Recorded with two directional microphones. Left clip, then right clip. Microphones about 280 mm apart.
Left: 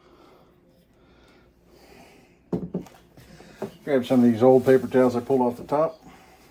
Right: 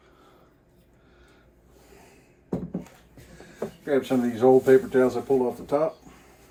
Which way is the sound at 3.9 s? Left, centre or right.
Left.